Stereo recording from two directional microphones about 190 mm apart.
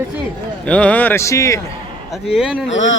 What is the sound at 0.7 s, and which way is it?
Speech, 5° left (ahead or behind).